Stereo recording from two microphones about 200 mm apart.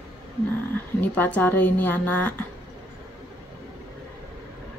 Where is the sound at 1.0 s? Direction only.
10° left (ahead or behind).